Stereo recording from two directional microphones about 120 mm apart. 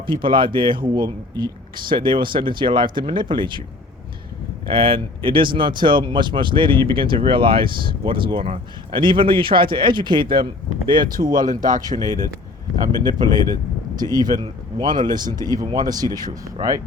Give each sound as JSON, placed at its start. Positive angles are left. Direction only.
{"t": 0.0, "sound": "speech", "side_deg": -45}
{"t": 4.6, "sound": "speech", "side_deg": -45}
{"t": 11.3, "sound": "speech", "side_deg": -90}
{"t": 11.8, "sound": "speech", "side_deg": -30}